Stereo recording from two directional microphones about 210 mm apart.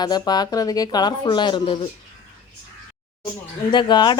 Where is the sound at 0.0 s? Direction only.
20° left (ahead or behind).